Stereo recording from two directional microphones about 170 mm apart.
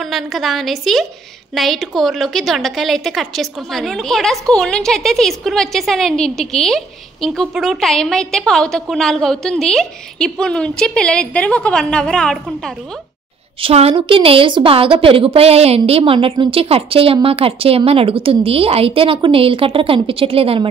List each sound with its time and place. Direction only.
0.0 s a woman's voice: centre (ahead or behind)
13.6 s a woman's voice: 35° right (ahead or behind)